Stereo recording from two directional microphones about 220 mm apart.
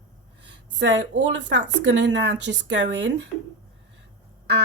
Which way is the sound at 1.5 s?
55° right (ahead or behind).